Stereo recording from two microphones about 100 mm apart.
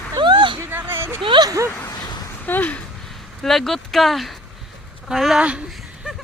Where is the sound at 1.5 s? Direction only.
30° right (ahead or behind).